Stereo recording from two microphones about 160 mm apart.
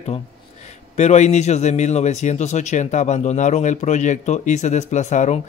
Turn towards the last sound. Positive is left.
turn(degrees=45)  # may be behind; listen again after turning